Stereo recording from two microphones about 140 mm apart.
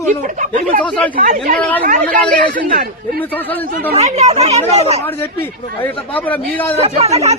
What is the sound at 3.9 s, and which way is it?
Speech, 50° right (ahead or behind).